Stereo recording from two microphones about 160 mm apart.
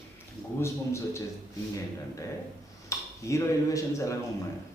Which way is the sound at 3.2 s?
20° left (ahead or behind).